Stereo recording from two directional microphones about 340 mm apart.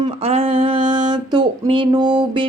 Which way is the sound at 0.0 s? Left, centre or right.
Centre.